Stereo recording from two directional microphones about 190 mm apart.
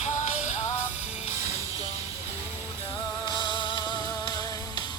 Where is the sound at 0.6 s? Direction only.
15° left (ahead or behind).